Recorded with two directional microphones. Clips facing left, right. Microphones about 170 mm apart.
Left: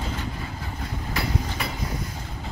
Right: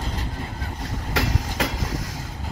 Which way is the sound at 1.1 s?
90° right.